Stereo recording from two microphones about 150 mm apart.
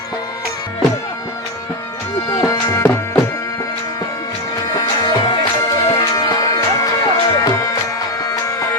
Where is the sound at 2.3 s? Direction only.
25° left (ahead or behind).